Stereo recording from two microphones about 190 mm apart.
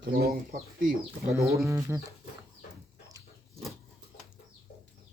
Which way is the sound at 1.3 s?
15° right (ahead or behind).